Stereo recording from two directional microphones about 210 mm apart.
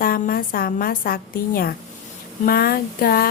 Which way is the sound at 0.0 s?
45° left (ahead or behind).